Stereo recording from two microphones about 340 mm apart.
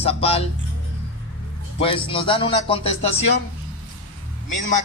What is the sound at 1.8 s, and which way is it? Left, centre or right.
Speech, centre.